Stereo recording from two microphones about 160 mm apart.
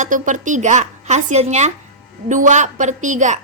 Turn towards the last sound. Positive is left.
turn(degrees=-50)  # may be behind; listen again after turning